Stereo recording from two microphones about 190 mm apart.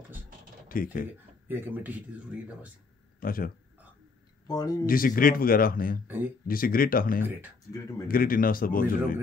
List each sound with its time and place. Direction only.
0.7 s speech: 45° left (ahead or behind)
1.5 s speech: 10° right (ahead or behind)
3.2 s a man's voice: 50° left (ahead or behind)
4.5 s speech: 20° left (ahead or behind)
4.8 s speech: 50° left (ahead or behind)
6.0 s speech: 10° right (ahead or behind)
6.4 s speech: 50° left (ahead or behind)